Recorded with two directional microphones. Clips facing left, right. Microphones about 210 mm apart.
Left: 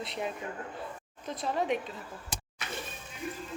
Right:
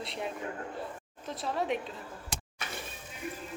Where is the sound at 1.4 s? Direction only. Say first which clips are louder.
Left 2 dB; centre (ahead or behind).